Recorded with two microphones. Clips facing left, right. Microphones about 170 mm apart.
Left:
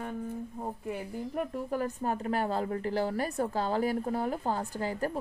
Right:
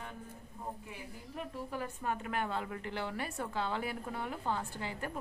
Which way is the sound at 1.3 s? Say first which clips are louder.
Left 7 dB; 45° left (ahead or behind).